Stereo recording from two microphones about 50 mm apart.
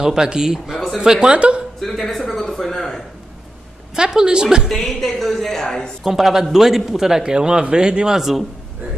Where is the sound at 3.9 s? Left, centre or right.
Centre.